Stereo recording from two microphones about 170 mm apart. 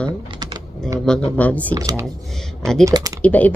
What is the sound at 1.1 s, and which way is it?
Speech, 5° left (ahead or behind).